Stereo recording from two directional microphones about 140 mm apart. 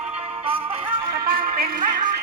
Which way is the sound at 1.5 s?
80° right.